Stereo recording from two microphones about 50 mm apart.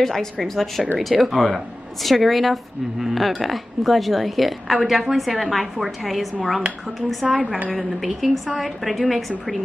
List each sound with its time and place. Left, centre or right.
0.0 s a woman's voice: centre
7.2 s speech: right
7.7 s a woman's voice: centre